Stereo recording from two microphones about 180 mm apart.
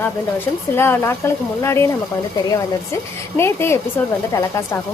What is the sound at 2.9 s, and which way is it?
Speech, 15° left (ahead or behind).